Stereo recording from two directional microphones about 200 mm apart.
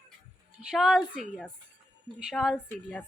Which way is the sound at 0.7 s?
Centre (ahead or behind).